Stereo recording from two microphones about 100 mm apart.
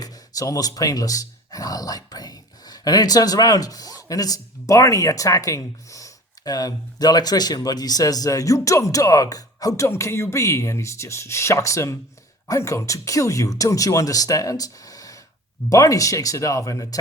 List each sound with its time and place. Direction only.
0.0 s speech: 35° left (ahead or behind)